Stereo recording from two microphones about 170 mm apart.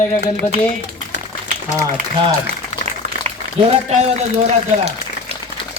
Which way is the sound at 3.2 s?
35° right (ahead or behind).